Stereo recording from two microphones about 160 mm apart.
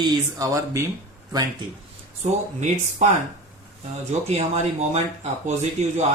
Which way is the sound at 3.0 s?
50° right (ahead or behind).